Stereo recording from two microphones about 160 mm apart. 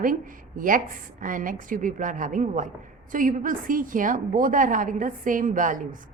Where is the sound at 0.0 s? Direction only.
60° right (ahead or behind).